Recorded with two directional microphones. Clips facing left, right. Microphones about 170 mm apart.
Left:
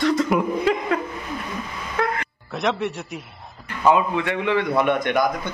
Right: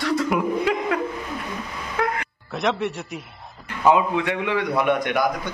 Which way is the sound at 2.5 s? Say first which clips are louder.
Even; centre (ahead or behind).